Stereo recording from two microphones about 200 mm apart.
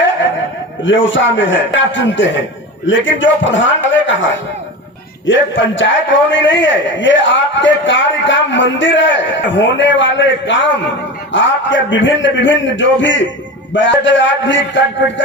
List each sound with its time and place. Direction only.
0.9 s a man's voice: 70° left (ahead or behind)